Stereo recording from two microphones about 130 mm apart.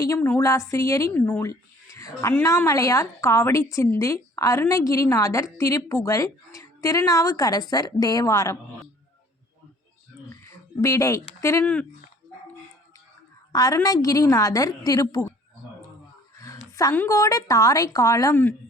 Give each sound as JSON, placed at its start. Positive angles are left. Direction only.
{"t": 0.0, "sound": "a woman's voice", "side_deg": 20}
{"t": 10.8, "sound": "a woman's voice", "side_deg": 25}
{"t": 11.6, "sound": "speech", "side_deg": 10}
{"t": 13.5, "sound": "a woman's voice", "side_deg": 30}
{"t": 16.9, "sound": "a woman's voice", "side_deg": 20}